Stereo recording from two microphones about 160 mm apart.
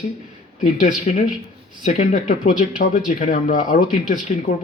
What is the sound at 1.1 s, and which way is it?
Speech, 45° left (ahead or behind).